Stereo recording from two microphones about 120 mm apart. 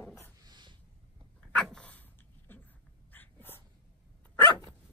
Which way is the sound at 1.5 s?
5° left (ahead or behind).